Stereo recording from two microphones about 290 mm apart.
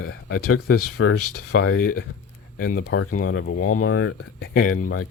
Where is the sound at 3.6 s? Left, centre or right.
Left.